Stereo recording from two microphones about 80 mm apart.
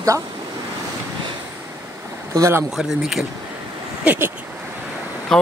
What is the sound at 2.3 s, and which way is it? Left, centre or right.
Speech, right.